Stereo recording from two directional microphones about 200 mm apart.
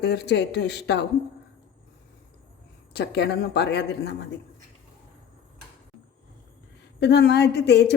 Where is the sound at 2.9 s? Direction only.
55° left (ahead or behind).